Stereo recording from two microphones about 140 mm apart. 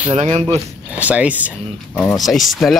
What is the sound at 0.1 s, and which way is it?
Speech, 50° right (ahead or behind).